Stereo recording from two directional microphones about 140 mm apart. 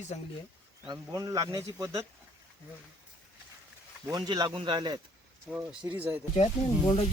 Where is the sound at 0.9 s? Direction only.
25° right (ahead or behind).